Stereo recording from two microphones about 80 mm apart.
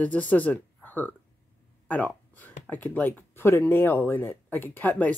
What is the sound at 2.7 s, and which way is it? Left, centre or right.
Speech, left.